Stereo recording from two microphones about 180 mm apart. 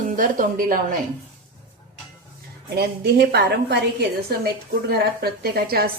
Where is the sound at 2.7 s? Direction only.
65° right (ahead or behind).